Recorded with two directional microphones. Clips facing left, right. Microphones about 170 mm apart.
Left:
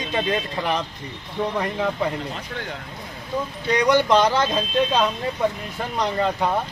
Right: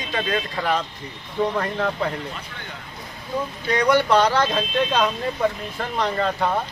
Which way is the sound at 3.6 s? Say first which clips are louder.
Left 1 dB; 20° left (ahead or behind).